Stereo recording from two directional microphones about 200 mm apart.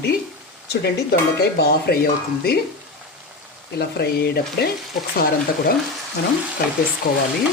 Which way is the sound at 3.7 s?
55° left (ahead or behind).